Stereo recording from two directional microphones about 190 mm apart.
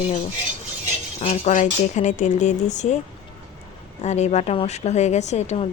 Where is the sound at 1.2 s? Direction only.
35° left (ahead or behind).